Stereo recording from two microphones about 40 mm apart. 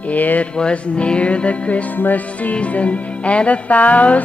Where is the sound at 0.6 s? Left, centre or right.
Left.